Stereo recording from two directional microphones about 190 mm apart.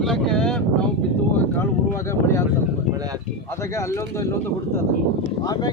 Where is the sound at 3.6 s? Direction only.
15° left (ahead or behind).